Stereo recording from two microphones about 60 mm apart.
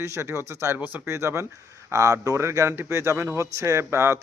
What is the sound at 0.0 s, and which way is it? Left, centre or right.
A man's voice, right.